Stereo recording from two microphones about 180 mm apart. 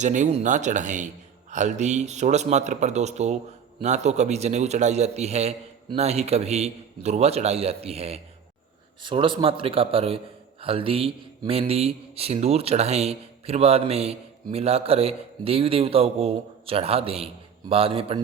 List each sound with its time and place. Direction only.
0.0 s a man's voice: 45° right (ahead or behind)